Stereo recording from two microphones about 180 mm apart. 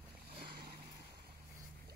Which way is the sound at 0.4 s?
55° right (ahead or behind).